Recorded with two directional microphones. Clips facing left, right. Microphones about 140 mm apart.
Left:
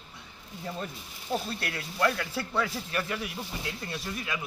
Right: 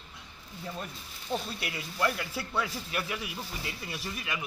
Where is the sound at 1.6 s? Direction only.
10° right (ahead or behind).